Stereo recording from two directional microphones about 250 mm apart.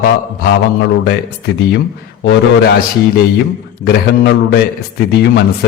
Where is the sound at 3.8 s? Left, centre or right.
Left.